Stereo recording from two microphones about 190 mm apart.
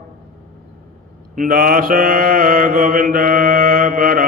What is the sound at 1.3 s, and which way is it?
Mantra, 45° right (ahead or behind).